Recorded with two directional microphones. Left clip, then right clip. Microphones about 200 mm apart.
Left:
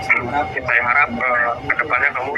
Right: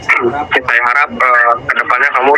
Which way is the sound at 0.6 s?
45° right (ahead or behind).